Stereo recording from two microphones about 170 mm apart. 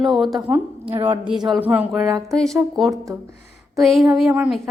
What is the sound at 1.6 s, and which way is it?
Speech, 10° right (ahead or behind).